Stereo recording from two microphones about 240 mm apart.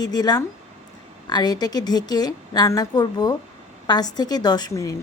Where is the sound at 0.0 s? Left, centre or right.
Centre.